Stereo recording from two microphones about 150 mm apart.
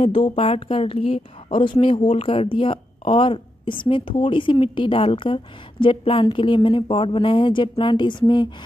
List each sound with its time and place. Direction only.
0.0 s a woman's voice: 35° left (ahead or behind)